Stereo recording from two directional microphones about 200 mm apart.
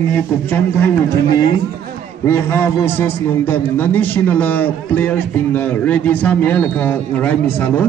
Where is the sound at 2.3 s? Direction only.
10° left (ahead or behind).